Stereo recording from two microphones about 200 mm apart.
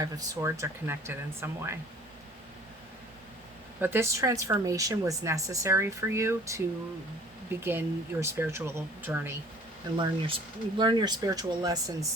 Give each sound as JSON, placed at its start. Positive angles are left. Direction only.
{"t": 0.0, "sound": "speech", "side_deg": -15}
{"t": 3.8, "sound": "speech", "side_deg": -10}
{"t": 7.6, "sound": "speech", "side_deg": -10}
{"t": 10.0, "sound": "speech", "side_deg": -25}